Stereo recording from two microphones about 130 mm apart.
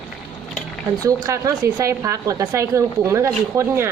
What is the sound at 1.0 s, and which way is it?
Speech, 25° right (ahead or behind).